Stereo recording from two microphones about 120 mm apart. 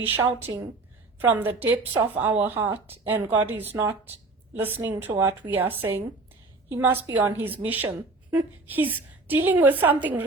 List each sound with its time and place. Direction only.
0.0 s a woman's voice: 15° right (ahead or behind)